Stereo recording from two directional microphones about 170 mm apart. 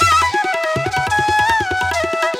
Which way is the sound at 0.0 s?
Centre (ahead or behind).